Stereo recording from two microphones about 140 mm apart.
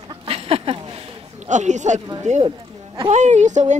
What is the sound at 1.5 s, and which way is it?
Speech, 60° right (ahead or behind).